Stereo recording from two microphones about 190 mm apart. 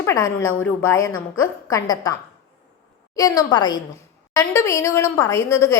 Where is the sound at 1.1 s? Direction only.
90° left.